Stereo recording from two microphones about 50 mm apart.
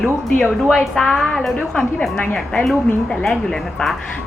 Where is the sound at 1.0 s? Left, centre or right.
Centre.